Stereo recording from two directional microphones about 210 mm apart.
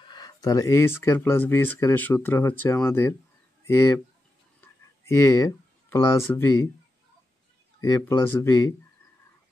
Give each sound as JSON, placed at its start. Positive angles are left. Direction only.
{"t": 0.0, "sound": "speech", "side_deg": 20}
{"t": 7.8, "sound": "speech", "side_deg": 15}